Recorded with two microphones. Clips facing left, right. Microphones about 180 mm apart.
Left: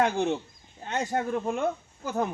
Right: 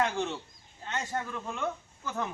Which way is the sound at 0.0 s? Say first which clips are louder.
Left 5 dB; 50° left (ahead or behind).